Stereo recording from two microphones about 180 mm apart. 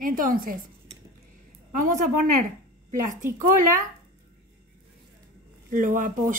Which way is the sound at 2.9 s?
45° right (ahead or behind).